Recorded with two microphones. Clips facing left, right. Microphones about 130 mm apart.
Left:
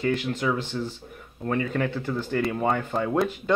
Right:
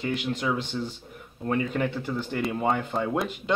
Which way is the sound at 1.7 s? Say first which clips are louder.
Left 1 dB; 20° right (ahead or behind).